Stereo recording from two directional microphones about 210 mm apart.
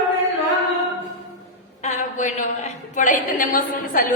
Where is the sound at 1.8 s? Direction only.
35° left (ahead or behind).